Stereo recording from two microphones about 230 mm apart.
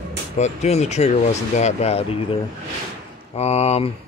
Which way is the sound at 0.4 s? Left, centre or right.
Left.